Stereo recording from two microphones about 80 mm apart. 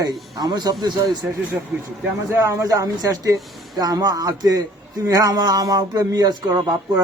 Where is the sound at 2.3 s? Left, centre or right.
Right.